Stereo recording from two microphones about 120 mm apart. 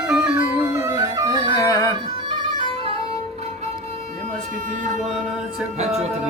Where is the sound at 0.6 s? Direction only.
25° right (ahead or behind).